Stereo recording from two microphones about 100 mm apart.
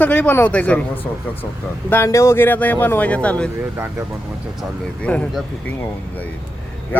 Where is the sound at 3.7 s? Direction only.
30° right (ahead or behind).